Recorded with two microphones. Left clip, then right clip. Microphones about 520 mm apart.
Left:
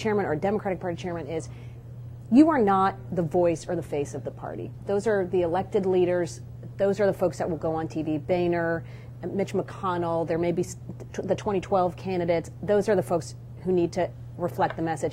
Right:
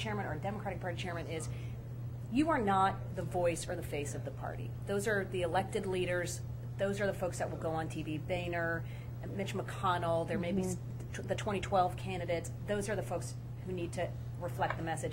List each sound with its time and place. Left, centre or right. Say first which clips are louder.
0.0 s a woman's voice: left 13 dB; left
0.8 s a woman's voice: left 8 dB; left